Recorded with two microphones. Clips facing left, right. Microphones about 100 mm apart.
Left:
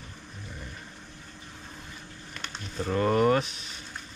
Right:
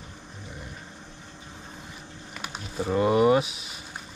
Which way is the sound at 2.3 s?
10° right (ahead or behind).